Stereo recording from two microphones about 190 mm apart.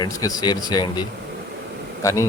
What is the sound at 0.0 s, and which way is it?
Speech, 20° left (ahead or behind).